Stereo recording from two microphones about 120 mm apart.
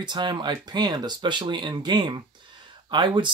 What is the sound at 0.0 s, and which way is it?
Speech, 40° right (ahead or behind).